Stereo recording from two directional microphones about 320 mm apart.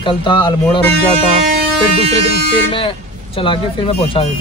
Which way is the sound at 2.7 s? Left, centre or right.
Centre.